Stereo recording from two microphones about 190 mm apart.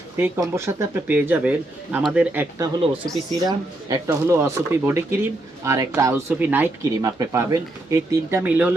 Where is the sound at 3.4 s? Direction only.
20° right (ahead or behind).